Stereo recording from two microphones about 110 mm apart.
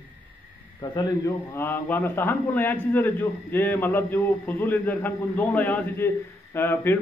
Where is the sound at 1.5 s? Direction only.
20° left (ahead or behind).